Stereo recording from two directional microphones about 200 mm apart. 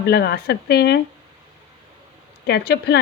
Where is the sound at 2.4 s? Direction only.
55° left (ahead or behind).